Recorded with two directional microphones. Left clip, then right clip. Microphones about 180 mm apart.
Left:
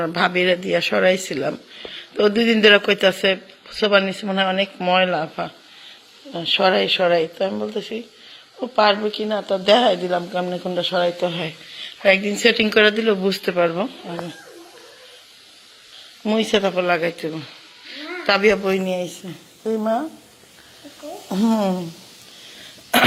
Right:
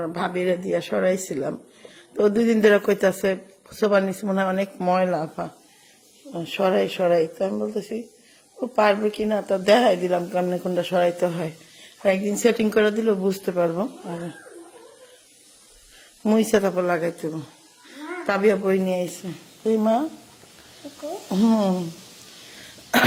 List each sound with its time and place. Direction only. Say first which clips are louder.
0.0 s speech: left 6 dB; centre (ahead or behind)
2.1 s speech: left 3 dB; 10° right (ahead or behind)
6.6 s speech: left 3 dB; 5° left (ahead or behind)
8.8 s speech: left 2 dB; 20° right (ahead or behind)
11.9 s a woman's voice: left 5 dB; 5° right (ahead or behind)
12.4 s speech: left 4 dB; 15° right (ahead or behind)
13.0 s speech: left 3 dB; centre (ahead or behind)
16.2 s speech: left 1 dB; 25° right (ahead or behind)
16.6 s speech: left 3 dB; 10° right (ahead or behind)
18.3 s speech: left 3 dB; 5° right (ahead or behind)
19.6 s speech: right 1 dB; 25° right (ahead or behind)
21.3 s speech: left 1 dB; 10° right (ahead or behind)
22.5 s cough: left 3 dB; 5° right (ahead or behind)